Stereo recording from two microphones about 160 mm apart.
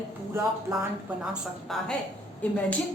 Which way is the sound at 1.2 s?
Centre (ahead or behind).